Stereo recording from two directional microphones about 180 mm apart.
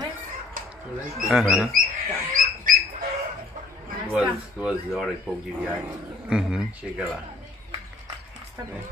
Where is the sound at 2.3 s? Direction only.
50° right (ahead or behind).